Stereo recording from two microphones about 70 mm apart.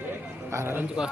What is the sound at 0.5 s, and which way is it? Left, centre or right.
Speech, right.